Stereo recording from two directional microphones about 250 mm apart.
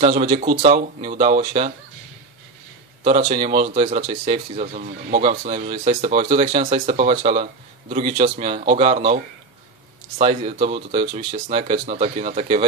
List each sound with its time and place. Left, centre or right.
0.0 s speech: right
3.0 s speech: right